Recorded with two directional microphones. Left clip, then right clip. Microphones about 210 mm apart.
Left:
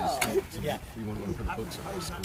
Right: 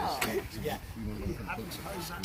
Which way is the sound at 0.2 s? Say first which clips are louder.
Left 4 dB; 35° left (ahead or behind).